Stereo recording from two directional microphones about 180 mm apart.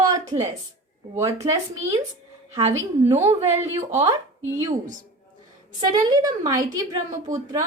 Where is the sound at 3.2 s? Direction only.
15° right (ahead or behind).